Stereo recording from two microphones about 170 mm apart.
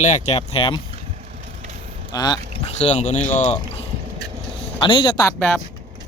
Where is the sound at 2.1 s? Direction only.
25° left (ahead or behind).